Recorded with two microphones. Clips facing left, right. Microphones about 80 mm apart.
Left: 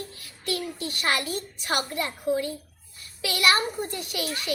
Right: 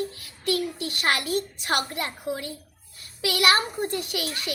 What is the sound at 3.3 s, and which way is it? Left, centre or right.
Speech, right.